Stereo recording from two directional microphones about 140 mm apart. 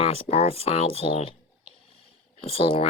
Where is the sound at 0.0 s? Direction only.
45° left (ahead or behind).